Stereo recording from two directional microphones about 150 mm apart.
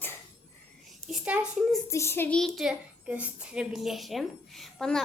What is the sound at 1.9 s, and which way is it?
Child singing, 15° left (ahead or behind).